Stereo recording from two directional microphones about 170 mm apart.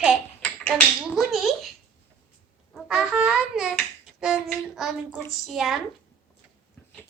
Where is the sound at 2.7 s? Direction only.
5° right (ahead or behind).